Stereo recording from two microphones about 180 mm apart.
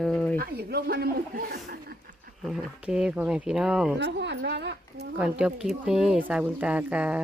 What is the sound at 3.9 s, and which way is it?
A woman's voice, 75° right (ahead or behind).